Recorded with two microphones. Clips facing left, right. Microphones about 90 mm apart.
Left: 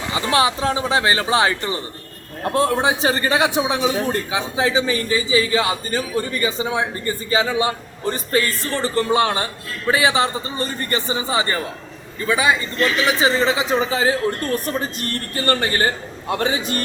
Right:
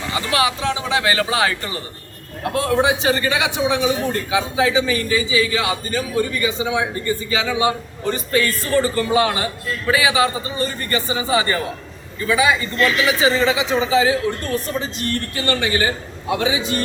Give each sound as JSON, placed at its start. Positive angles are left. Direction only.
{"t": 0.1, "sound": "a man's voice", "side_deg": 25}